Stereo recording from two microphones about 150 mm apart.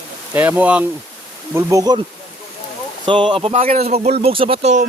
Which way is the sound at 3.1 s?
35° right (ahead or behind).